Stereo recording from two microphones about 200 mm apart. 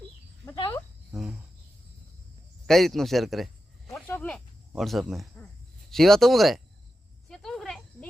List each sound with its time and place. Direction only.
0.4 s a sound: 15° left (ahead or behind)
2.6 s speech: centre (ahead or behind)
3.9 s snake: 10° left (ahead or behind)
5.9 s speech: centre (ahead or behind)
7.3 s cricket: centre (ahead or behind)